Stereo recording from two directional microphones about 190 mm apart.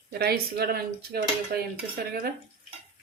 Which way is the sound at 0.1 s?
55° right (ahead or behind).